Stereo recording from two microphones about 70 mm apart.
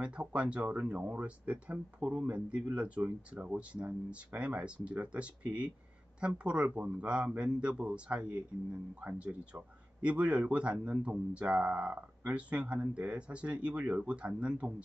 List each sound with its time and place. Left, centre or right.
0.0 s speech: centre